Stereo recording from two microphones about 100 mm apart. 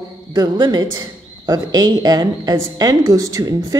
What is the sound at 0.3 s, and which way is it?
A woman's voice, 40° right (ahead or behind).